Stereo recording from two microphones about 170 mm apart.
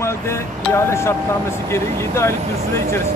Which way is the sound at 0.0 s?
15° left (ahead or behind).